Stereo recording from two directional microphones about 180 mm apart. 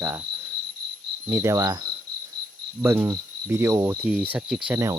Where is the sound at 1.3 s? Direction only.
15° right (ahead or behind).